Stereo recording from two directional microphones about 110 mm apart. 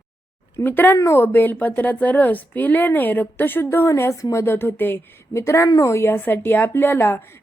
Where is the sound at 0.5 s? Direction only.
20° left (ahead or behind).